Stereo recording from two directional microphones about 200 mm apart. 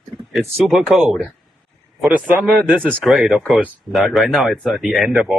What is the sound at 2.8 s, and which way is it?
Speech, centre (ahead or behind).